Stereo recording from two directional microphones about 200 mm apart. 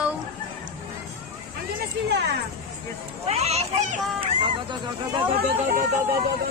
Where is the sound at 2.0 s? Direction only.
55° right (ahead or behind).